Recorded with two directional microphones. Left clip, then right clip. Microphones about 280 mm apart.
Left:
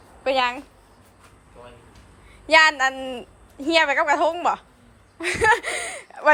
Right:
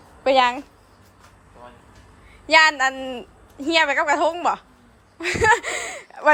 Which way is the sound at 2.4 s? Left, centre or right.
Centre.